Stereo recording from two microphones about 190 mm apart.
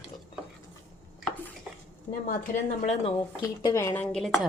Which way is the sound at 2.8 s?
35° left (ahead or behind).